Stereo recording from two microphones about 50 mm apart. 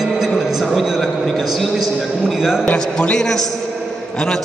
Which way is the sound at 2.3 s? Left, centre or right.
Centre.